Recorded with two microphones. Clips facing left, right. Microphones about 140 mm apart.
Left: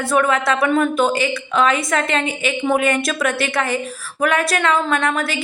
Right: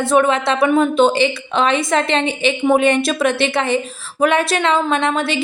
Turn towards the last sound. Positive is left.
turn(degrees=-25)  # may be behind; listen again after turning